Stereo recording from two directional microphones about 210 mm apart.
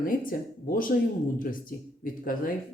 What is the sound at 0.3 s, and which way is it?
Speech, 40° left (ahead or behind).